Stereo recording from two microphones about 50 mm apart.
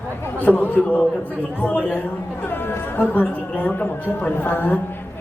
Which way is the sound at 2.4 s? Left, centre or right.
Left.